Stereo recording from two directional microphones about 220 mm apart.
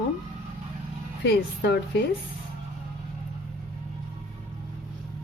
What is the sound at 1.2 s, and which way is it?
Speech, 50° left (ahead or behind).